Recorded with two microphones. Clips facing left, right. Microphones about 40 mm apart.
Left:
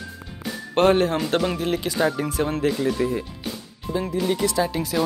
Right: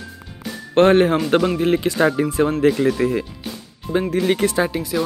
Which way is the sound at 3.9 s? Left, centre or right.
Right.